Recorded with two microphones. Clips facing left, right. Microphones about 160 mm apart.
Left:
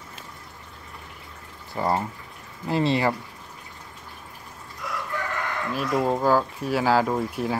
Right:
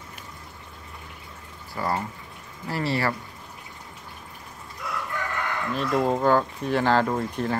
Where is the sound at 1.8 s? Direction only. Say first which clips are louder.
Left 3 dB; 20° left (ahead or behind).